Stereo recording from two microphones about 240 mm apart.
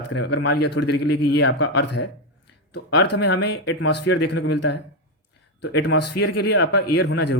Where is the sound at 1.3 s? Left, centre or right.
Left.